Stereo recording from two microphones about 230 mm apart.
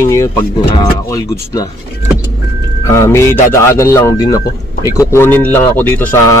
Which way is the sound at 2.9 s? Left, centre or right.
Centre.